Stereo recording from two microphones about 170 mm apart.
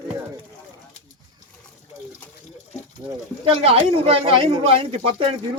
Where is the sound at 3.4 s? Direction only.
35° right (ahead or behind).